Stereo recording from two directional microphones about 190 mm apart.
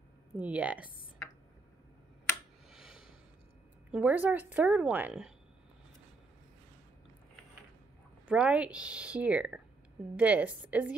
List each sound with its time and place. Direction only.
0.4 s a woman's voice: 5° right (ahead or behind)
2.7 s a sound: 5° right (ahead or behind)
3.9 s a woman's voice: 10° right (ahead or behind)
8.3 s a woman's voice: 5° right (ahead or behind)